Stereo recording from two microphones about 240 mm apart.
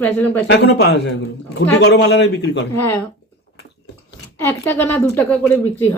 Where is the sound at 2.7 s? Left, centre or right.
Centre.